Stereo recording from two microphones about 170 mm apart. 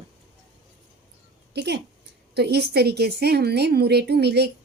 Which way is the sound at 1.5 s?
80° right.